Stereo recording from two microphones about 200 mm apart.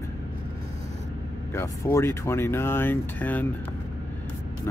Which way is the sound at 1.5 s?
15° left (ahead or behind).